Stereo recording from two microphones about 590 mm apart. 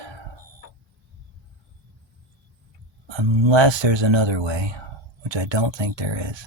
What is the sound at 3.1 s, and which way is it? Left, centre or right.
Speech, right.